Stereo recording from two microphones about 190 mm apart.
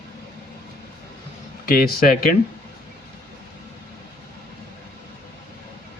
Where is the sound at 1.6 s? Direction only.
50° left (ahead or behind).